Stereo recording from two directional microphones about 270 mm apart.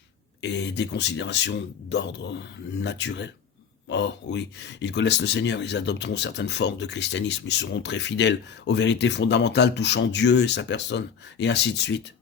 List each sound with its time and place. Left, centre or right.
0.4 s speech: left